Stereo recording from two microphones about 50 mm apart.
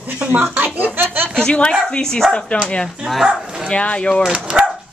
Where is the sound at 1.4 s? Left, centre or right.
Centre.